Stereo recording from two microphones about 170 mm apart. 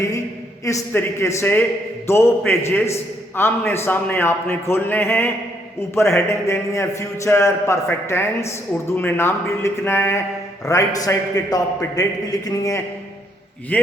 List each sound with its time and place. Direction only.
0.6 s a man's voice: 20° left (ahead or behind)
13.7 s a man's voice: 10° left (ahead or behind)